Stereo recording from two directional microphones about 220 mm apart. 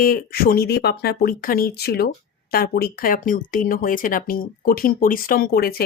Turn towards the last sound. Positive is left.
turn(degrees=45)  # may be behind; listen again after turning